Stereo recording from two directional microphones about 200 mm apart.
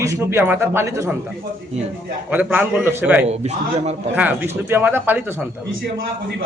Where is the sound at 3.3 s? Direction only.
30° right (ahead or behind).